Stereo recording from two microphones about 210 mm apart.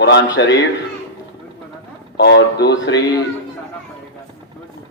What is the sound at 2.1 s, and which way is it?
Speech, 55° left (ahead or behind).